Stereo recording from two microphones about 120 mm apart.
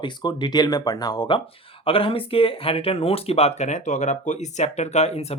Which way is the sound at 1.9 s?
50° left (ahead or behind).